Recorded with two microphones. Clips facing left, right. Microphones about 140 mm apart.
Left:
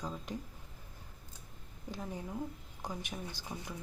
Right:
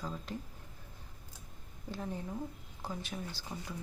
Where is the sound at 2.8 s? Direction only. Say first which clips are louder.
Right 1 dB; 15° left (ahead or behind).